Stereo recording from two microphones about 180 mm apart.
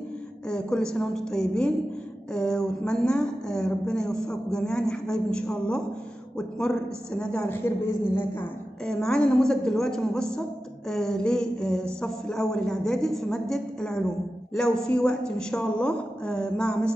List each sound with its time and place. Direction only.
0.5 s a woman's voice: 5° left (ahead or behind)